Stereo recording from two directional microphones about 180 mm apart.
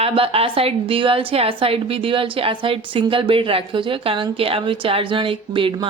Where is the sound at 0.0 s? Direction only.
30° right (ahead or behind).